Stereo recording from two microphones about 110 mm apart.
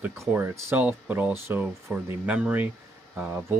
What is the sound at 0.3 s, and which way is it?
Speech, 15° right (ahead or behind).